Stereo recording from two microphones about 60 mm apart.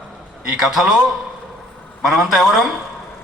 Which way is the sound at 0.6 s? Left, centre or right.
Centre.